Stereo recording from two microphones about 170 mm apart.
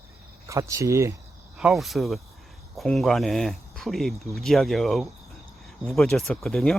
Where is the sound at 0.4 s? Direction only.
20° right (ahead or behind).